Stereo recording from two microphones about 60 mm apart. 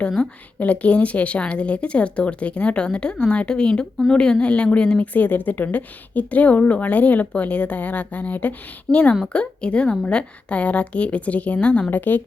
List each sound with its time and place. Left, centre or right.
0.2 s a woman's voice: left